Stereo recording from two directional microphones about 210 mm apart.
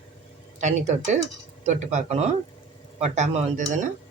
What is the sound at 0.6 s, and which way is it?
Speech, 35° right (ahead or behind).